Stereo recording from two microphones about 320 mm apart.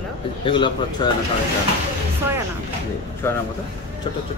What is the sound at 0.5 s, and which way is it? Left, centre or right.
Speech, centre.